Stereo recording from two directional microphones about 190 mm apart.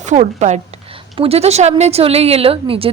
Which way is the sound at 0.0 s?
40° right (ahead or behind).